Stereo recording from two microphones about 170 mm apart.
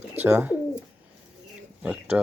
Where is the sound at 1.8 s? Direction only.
10° right (ahead or behind).